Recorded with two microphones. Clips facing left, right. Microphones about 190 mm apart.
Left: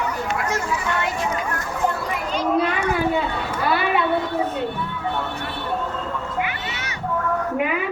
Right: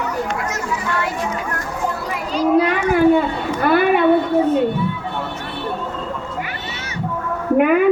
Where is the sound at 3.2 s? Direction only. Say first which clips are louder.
Right 5 dB; 55° right (ahead or behind).